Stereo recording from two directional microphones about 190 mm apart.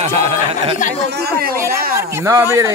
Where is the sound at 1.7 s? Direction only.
50° right (ahead or behind).